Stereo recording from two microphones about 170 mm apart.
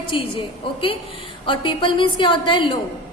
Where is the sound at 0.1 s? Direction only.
30° left (ahead or behind).